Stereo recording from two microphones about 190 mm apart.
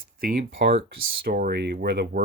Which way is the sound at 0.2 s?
50° right (ahead or behind).